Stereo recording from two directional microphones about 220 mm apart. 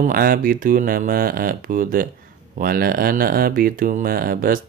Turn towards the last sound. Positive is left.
turn(degrees=-40)  # may be behind; listen again after turning